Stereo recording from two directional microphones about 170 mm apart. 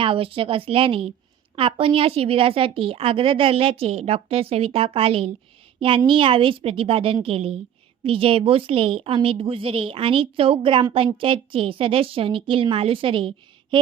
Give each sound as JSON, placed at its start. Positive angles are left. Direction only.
{"t": 0.0, "sound": "a woman's voice", "side_deg": -30}